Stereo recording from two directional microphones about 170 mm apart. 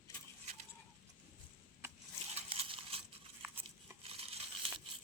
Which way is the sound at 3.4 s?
10° right (ahead or behind).